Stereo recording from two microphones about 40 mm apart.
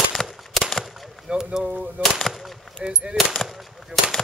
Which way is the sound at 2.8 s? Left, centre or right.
Right.